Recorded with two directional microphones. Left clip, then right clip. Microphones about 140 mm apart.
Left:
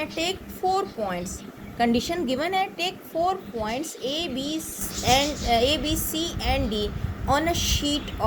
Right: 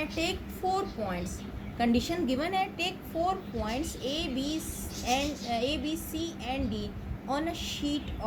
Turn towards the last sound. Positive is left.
turn(degrees=45)  # may be behind; listen again after turning